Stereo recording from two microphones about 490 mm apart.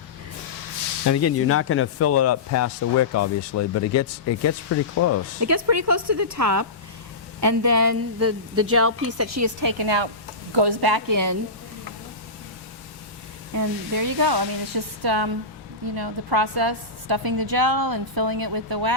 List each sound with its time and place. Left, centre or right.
1.0 s speech: left
5.4 s a woman's voice: right
13.5 s a woman's voice: right